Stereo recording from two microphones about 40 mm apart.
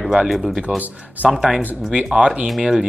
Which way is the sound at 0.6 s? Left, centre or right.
Right.